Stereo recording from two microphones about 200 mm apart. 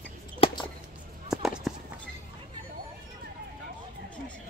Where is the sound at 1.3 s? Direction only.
Centre (ahead or behind).